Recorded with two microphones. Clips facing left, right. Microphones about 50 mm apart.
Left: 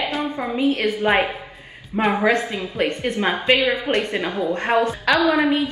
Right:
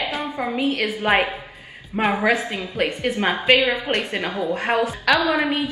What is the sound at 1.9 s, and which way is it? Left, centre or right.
A woman's voice, centre.